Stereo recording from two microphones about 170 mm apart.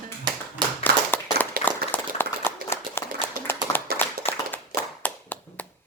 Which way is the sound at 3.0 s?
15° left (ahead or behind).